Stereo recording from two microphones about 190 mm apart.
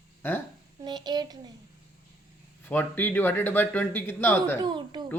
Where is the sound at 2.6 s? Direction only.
10° left (ahead or behind).